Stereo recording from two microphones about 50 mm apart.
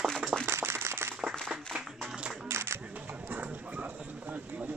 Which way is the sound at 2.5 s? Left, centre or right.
Right.